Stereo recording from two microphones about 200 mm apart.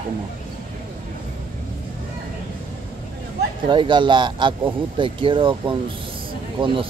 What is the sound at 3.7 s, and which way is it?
Speech, 25° right (ahead or behind).